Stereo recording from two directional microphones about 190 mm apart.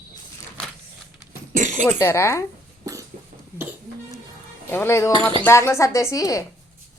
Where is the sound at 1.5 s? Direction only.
40° right (ahead or behind).